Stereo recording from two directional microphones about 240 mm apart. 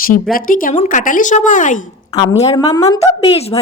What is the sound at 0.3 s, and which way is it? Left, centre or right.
A woman's voice, left.